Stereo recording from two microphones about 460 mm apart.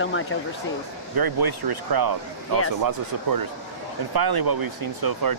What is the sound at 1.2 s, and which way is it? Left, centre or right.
Speech, right.